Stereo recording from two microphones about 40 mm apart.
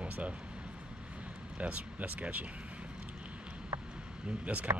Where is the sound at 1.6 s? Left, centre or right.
Right.